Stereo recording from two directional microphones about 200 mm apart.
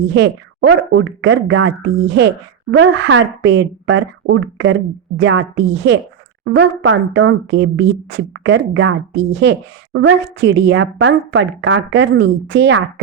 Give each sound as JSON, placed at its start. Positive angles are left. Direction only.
{"t": 0.0, "sound": "speech", "side_deg": -60}